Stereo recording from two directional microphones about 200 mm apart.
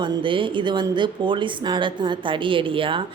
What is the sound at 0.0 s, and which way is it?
Speech, 25° right (ahead or behind).